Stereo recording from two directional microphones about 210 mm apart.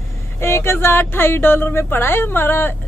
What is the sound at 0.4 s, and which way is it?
Speech, 10° left (ahead or behind).